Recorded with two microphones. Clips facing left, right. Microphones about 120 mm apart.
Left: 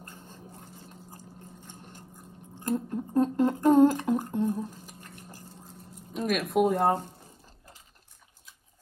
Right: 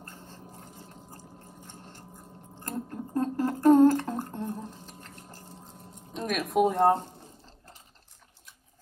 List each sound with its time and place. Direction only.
0.0 s a sound: 15° left (ahead or behind)
1.7 s sewing machine: 15° left (ahead or behind)
2.6 s humming: 20° left (ahead or behind)
6.1 s speech: centre (ahead or behind)